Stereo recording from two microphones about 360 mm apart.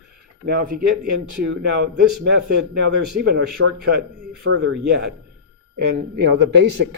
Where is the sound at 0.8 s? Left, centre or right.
Right.